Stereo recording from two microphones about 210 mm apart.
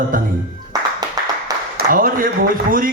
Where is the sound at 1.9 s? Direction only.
40° right (ahead or behind).